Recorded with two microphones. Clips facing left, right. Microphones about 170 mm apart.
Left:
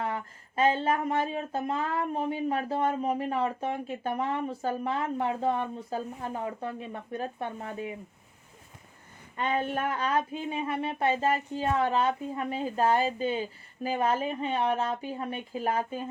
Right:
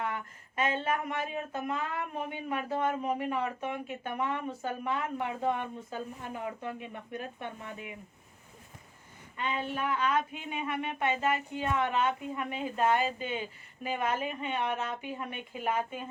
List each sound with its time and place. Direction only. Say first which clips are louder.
0.0 s speech: left 3 dB; 30° left (ahead or behind)
9.4 s speech: left 5 dB; 45° left (ahead or behind)